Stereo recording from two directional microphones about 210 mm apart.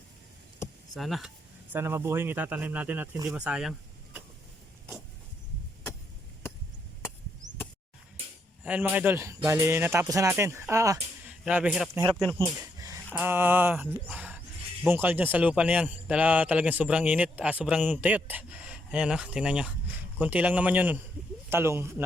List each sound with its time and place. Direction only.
0.9 s a man's voice: centre (ahead or behind)
1.7 s speech: 10° right (ahead or behind)
8.6 s speech: 10° right (ahead or behind)
12.4 s a sound: 15° right (ahead or behind)
13.1 s a man's voice: 10° right (ahead or behind)